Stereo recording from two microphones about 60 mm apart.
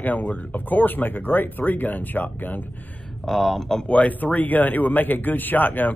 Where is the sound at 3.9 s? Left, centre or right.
Left.